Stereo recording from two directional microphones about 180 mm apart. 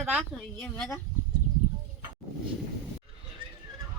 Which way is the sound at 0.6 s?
5° left (ahead or behind).